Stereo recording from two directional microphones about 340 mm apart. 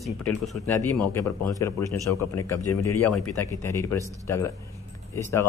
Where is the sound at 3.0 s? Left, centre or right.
Left.